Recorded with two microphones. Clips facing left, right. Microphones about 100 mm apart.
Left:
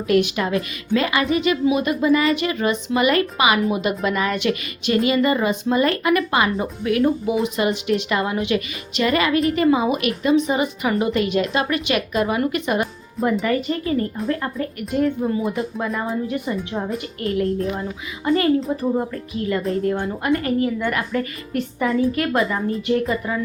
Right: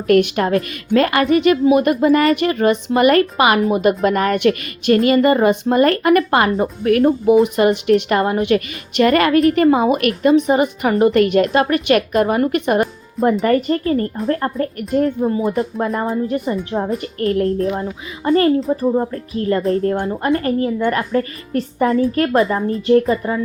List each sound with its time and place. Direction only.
0.1 s a woman's voice: 55° right (ahead or behind); by 23.4 s 30° right (ahead or behind)